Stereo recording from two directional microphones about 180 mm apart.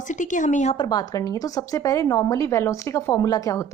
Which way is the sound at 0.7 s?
25° left (ahead or behind).